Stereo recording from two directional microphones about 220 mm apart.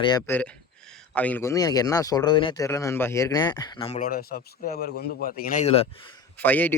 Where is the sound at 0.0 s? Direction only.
15° left (ahead or behind).